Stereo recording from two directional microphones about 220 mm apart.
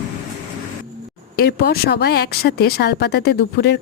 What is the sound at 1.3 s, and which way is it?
Speech, 45° left (ahead or behind).